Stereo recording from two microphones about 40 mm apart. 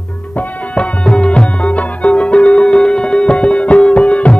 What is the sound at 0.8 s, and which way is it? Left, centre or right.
Music, left.